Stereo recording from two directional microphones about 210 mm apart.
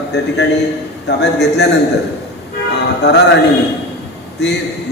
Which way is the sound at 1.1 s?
55° left (ahead or behind).